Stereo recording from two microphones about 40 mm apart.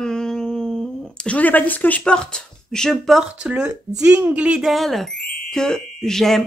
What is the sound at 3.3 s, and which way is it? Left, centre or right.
Speech, right.